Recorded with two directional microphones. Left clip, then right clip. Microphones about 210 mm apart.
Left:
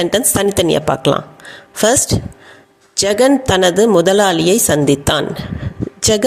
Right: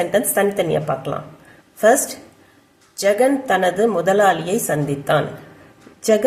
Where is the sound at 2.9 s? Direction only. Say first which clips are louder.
Left 4 dB; 40° left (ahead or behind).